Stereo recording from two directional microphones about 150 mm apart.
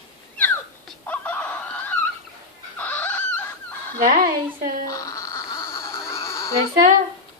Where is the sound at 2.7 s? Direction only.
10° left (ahead or behind).